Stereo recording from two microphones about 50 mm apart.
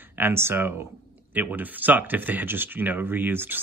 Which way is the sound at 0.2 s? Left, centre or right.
Right.